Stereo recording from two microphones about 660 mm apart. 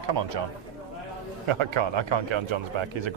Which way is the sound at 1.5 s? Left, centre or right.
Right.